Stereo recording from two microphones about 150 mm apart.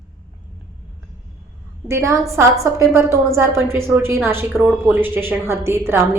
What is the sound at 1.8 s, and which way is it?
A woman's voice, 20° right (ahead or behind).